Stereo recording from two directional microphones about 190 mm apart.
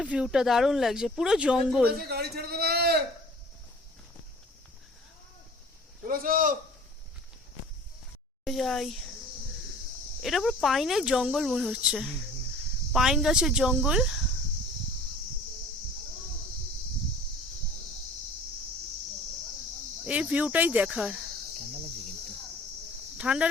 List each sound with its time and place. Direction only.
0.0 s speech: 5° right (ahead or behind)
1.9 s a sound: 55° right (ahead or behind)
6.1 s a man's voice: 45° right (ahead or behind)
8.4 s speech: centre (ahead or behind)
10.2 s speech: centre (ahead or behind)
20.1 s speech: 5° right (ahead or behind)
23.1 s speech: 5° right (ahead or behind)